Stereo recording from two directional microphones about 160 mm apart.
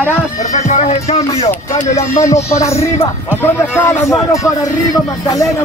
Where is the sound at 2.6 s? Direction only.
20° left (ahead or behind).